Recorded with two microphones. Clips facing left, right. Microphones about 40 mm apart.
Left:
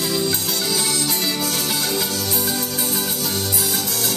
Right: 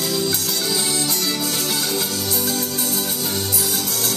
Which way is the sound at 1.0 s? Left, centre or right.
Left.